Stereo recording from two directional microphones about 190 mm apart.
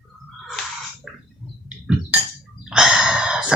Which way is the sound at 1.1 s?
Centre (ahead or behind).